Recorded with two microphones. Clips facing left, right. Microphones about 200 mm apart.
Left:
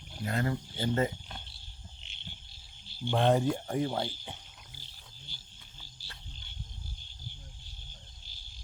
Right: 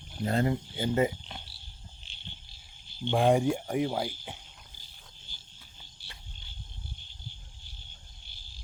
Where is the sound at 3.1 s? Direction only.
10° right (ahead or behind).